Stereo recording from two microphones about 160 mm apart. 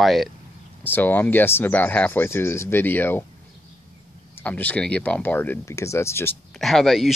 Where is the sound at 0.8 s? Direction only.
10° left (ahead or behind).